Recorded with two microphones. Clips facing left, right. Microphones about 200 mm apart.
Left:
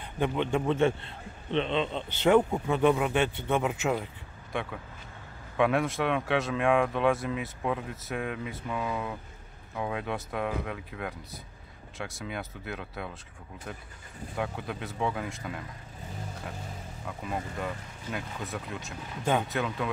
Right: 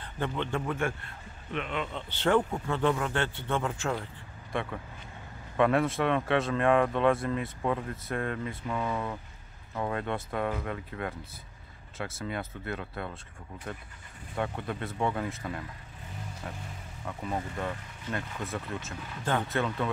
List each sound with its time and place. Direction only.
0.0 s a man's voice: 15° left (ahead or behind)
4.5 s speech: centre (ahead or behind)
17.2 s speech: 5° left (ahead or behind)